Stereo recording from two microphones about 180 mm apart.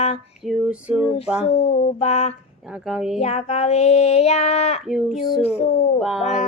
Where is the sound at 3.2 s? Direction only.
35° left (ahead or behind).